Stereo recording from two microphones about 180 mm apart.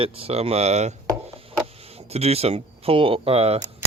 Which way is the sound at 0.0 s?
30° right (ahead or behind).